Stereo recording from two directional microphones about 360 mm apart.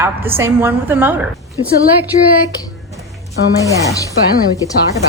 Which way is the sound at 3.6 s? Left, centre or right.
Centre.